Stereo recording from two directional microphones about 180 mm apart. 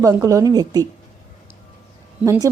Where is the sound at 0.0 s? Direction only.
20° right (ahead or behind).